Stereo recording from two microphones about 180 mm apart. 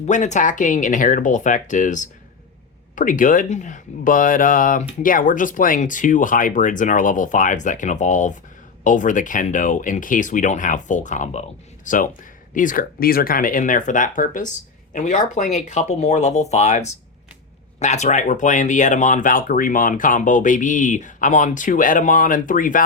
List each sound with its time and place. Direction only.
0.0 s speech: 40° left (ahead or behind)